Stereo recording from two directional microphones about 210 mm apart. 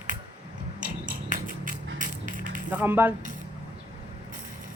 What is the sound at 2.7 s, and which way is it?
Speech, 10° right (ahead or behind).